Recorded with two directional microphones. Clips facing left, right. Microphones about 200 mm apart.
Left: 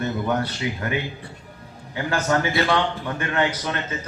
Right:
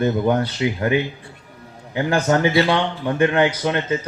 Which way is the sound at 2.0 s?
25° right (ahead or behind).